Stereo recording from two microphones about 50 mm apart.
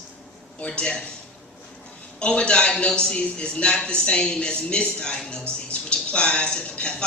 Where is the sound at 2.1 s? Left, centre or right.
Left.